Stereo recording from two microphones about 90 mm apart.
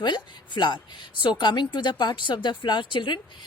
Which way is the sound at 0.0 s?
60° left (ahead or behind).